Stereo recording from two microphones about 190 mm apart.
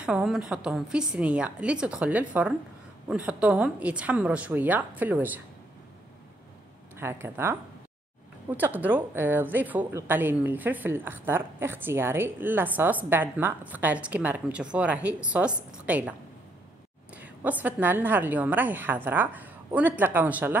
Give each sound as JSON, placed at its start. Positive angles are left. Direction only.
{"t": 0.0, "sound": "a woman's voice", "side_deg": -5}
{"t": 7.0, "sound": "a woman's voice", "side_deg": -10}